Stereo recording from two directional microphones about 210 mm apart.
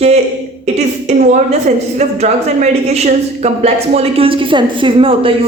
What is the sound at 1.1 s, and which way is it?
A woman's voice, 30° right (ahead or behind).